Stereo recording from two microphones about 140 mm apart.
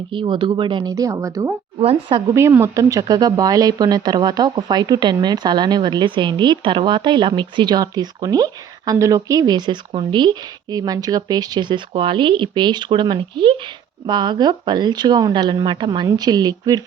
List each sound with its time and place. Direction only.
0.1 s speech: 35° right (ahead or behind)
1.8 s speech: 40° right (ahead or behind)
2.3 s speech: 20° right (ahead or behind)